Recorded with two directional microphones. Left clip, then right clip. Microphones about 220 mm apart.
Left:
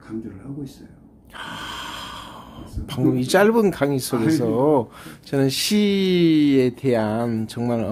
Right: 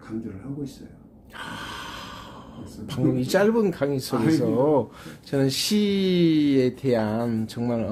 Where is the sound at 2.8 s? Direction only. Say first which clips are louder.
Left 3 dB; 15° left (ahead or behind).